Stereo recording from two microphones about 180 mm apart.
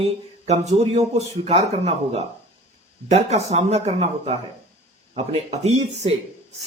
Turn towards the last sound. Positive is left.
turn(degrees=-35)  # may be behind; listen again after turning